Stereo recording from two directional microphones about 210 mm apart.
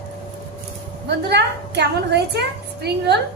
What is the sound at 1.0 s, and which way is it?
A woman's voice, 50° right (ahead or behind).